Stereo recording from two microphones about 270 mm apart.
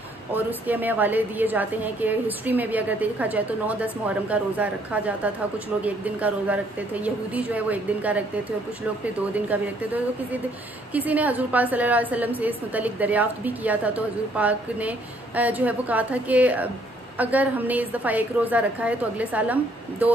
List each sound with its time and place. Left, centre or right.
0.3 s a woman's voice: centre
10.9 s a woman's voice: centre